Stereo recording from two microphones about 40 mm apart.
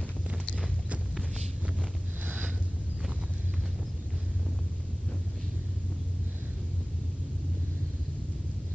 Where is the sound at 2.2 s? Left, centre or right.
Right.